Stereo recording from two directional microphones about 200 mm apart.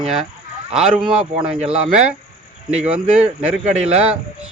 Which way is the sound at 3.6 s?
35° right (ahead or behind).